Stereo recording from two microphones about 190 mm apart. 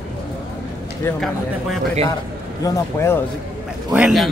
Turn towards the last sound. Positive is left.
turn(degrees=-5)  # may be behind; listen again after turning